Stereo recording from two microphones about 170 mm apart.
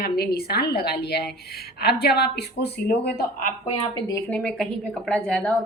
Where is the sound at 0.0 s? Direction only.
65° left (ahead or behind).